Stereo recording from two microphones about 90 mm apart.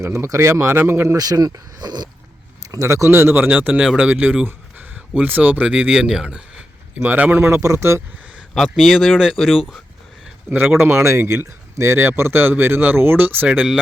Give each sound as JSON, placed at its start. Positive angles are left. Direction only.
{"t": 0.0, "sound": "speech", "side_deg": -35}
{"t": 1.1, "sound": "speech", "side_deg": -45}
{"t": 2.8, "sound": "speech", "side_deg": -30}
{"t": 8.5, "sound": "speech", "side_deg": 0}
{"t": 10.5, "sound": "speech", "side_deg": -20}